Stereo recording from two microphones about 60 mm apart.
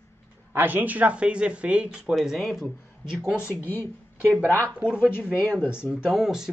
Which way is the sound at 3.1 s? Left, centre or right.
Centre.